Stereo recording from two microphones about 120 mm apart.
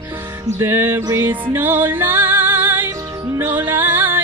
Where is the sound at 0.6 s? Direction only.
20° right (ahead or behind).